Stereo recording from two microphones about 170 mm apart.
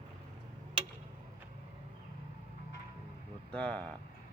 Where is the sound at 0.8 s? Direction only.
30° right (ahead or behind).